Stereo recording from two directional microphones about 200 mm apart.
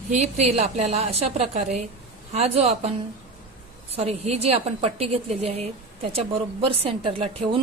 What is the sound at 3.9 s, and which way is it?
A woman's voice, 30° right (ahead or behind).